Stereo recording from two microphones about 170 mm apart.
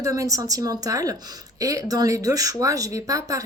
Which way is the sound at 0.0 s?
20° right (ahead or behind).